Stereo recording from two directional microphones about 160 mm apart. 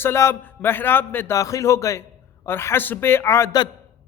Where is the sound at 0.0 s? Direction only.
15° left (ahead or behind).